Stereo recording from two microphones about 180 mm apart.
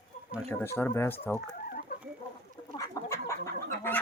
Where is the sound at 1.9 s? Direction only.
60° left (ahead or behind).